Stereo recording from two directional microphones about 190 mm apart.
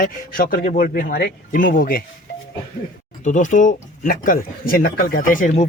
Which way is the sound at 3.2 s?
40° left (ahead or behind).